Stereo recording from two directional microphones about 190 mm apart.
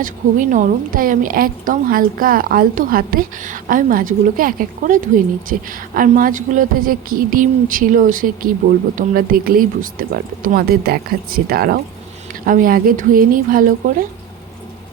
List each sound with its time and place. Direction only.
0.0 s speech: 40° right (ahead or behind)